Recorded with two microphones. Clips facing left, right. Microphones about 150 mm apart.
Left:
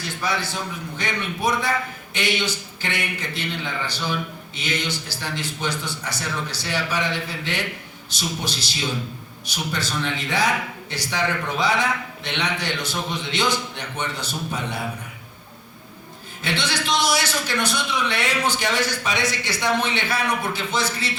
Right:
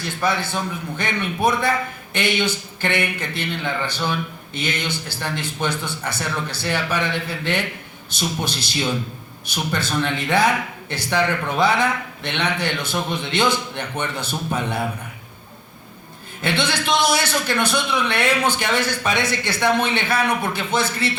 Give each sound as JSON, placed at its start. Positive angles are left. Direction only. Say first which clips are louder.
{"t": 0.2, "sound": "speech", "louder": "right 4 dB", "side_deg": -55}
{"t": 16.4, "sound": "speech", "louder": "right 4 dB", "side_deg": -55}